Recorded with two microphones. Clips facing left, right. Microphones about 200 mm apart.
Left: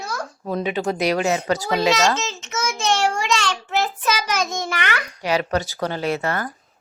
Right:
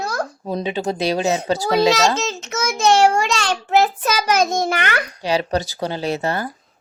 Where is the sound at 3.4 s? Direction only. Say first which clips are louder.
Right 6 dB; 35° right (ahead or behind).